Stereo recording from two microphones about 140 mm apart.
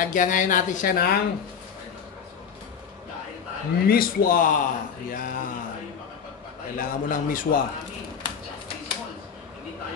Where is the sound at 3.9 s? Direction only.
90° left.